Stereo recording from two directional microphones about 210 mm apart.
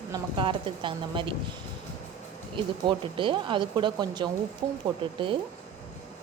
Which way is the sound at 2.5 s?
25° right (ahead or behind).